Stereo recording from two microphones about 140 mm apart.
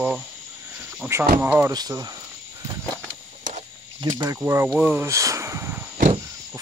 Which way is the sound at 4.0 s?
30° right (ahead or behind).